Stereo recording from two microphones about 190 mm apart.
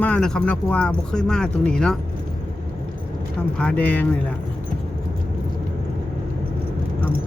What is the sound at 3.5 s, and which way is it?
Speech, 5° left (ahead or behind).